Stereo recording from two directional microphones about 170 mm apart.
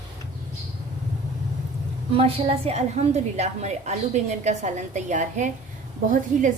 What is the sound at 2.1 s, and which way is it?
A woman's voice, 35° right (ahead or behind).